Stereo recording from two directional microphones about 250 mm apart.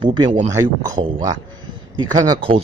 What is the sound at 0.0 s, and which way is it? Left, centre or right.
Speech, centre.